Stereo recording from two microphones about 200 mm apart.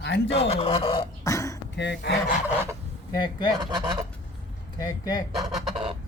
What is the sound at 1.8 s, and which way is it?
Speech, 60° left (ahead or behind).